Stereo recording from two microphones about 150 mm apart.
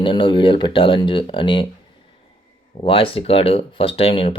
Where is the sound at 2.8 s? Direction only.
35° left (ahead or behind).